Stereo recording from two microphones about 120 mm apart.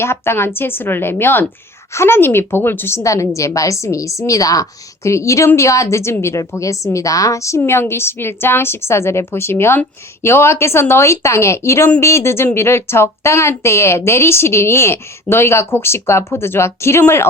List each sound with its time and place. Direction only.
0.0 s a woman's voice: 20° left (ahead or behind)